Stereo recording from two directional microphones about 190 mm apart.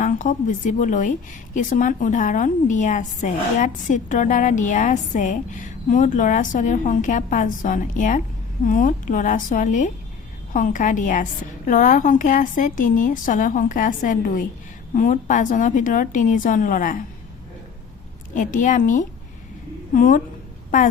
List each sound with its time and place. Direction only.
0.0 s a woman's voice: 40° left (ahead or behind)
18.3 s a woman's voice: 45° left (ahead or behind)